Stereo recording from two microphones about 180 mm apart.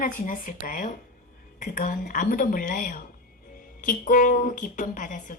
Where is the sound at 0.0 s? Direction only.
50° left (ahead or behind).